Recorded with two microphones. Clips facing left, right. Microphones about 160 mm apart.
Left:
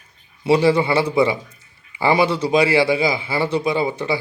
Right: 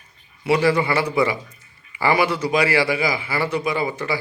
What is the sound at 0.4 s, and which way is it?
A man's voice, 25° left (ahead or behind).